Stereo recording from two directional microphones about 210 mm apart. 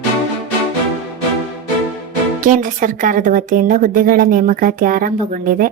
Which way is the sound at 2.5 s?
40° right (ahead or behind).